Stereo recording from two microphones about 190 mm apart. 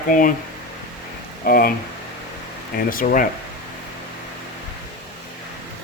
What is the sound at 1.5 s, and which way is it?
Speech, 50° left (ahead or behind).